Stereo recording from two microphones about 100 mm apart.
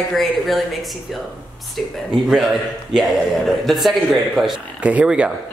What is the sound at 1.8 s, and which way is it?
Speech, centre (ahead or behind).